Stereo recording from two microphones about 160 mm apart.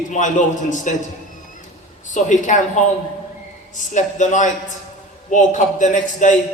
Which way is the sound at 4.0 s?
50° left (ahead or behind).